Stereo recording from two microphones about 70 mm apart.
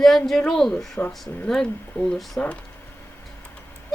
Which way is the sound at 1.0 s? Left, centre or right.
Left.